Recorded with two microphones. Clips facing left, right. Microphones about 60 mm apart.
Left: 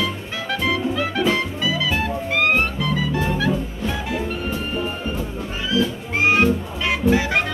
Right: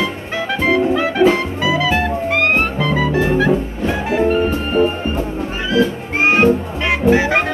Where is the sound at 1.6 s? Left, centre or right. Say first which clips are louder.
Right 9 dB; right.